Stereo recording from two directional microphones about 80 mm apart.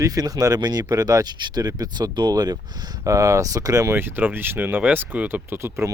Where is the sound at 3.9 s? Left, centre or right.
Right.